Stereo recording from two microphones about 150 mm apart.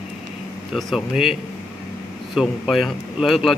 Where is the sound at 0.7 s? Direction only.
Centre (ahead or behind).